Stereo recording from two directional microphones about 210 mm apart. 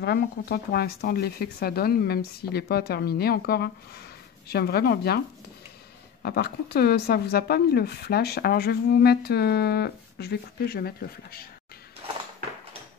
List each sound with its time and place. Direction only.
0.0 s speech: 50° left (ahead or behind)
6.2 s speech: 45° left (ahead or behind)